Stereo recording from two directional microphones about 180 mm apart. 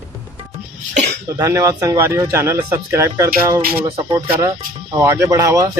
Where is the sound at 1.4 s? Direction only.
20° right (ahead or behind).